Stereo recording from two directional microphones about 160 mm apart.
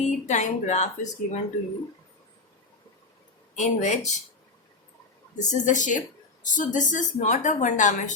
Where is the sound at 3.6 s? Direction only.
50° left (ahead or behind).